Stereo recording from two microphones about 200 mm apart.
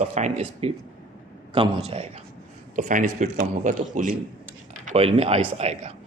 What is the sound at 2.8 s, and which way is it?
Speech, 40° right (ahead or behind).